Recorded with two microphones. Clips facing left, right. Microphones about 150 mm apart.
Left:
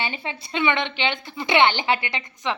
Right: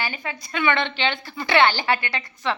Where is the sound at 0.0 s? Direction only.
25° left (ahead or behind).